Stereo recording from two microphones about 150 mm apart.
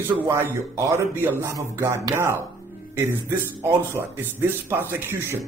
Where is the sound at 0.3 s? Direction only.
20° right (ahead or behind).